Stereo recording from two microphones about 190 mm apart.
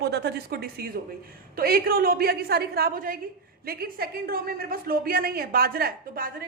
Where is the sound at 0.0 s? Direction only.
60° right (ahead or behind).